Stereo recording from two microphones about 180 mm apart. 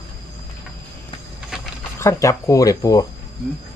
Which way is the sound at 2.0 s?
15° left (ahead or behind).